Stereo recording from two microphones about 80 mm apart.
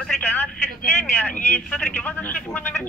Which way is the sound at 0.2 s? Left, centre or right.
Left.